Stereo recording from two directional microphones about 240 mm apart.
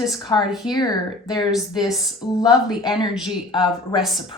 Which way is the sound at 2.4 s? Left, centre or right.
Centre.